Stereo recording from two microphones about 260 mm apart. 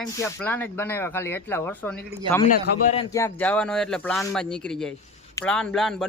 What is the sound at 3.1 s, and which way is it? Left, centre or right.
Speech, centre.